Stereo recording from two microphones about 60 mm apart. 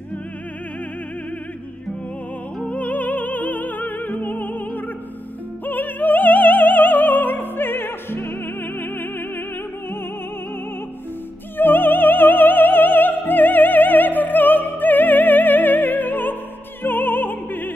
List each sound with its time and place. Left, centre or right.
2.6 s music: left
5.7 s opera: left
8.7 s music: left
11.5 s opera: left
16.8 s music: left